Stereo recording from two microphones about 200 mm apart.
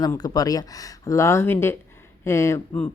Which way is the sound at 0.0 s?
20° left (ahead or behind).